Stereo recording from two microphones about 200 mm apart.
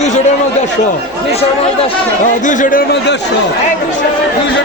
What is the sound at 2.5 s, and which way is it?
Speech, 40° left (ahead or behind).